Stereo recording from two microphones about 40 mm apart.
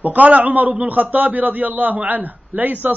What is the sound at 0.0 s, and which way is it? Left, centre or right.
A man's voice, right.